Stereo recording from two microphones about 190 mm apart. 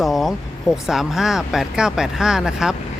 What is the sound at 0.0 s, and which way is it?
Speech, centre (ahead or behind).